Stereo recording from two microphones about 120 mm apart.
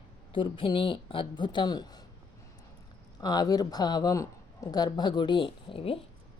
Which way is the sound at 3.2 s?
35° left (ahead or behind).